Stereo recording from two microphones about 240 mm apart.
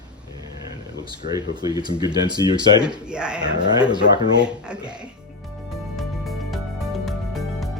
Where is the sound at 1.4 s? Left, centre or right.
Centre.